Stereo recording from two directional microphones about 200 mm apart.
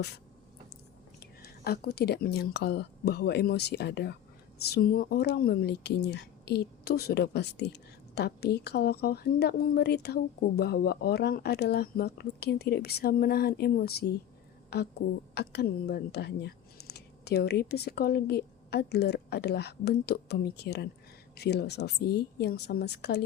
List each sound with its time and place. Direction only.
1.2 s a woman's voice: 50° left (ahead or behind)